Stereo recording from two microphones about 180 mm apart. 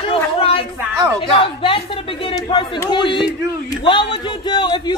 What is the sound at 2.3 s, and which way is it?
Speech, 25° left (ahead or behind).